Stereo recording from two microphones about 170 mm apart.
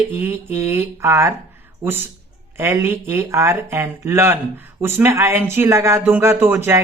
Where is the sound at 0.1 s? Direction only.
15° right (ahead or behind).